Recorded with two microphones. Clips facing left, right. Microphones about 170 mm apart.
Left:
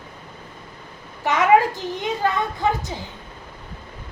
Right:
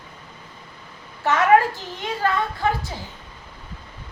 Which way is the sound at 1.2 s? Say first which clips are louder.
Even; 15° left (ahead or behind).